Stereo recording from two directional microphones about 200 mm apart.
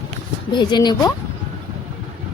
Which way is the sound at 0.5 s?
20° left (ahead or behind).